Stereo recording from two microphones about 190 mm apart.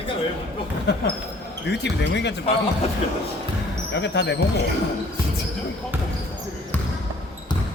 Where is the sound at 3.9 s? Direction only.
65° left (ahead or behind).